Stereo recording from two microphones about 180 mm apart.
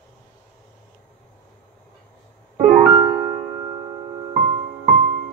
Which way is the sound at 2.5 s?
45° right (ahead or behind).